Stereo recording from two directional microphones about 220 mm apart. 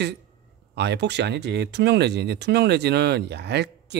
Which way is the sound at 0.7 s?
50° right (ahead or behind).